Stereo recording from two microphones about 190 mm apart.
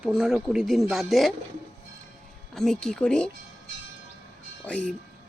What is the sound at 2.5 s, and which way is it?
Speech, 5° left (ahead or behind).